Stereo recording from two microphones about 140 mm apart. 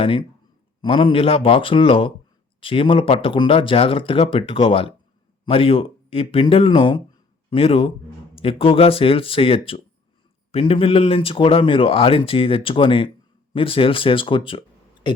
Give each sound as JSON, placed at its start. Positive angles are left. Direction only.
{"t": 0.0, "sound": "a man's voice", "side_deg": 40}